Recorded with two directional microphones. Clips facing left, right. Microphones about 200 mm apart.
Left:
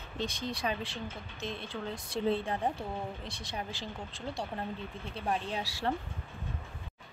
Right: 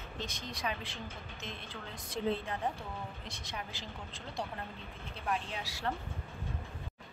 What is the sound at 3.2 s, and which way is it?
Speech, 30° left (ahead or behind).